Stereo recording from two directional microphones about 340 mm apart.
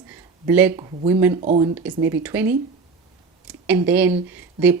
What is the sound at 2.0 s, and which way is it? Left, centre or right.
Speech, centre.